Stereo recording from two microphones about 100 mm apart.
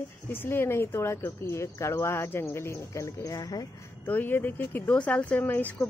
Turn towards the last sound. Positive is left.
turn(degrees=15)  # may be behind; listen again after turning